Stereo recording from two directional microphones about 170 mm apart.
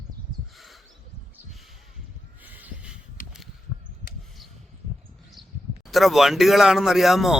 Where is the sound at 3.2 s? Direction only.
55° left (ahead or behind).